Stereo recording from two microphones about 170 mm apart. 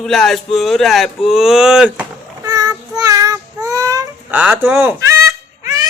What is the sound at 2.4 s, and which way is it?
Child singing, 20° right (ahead or behind).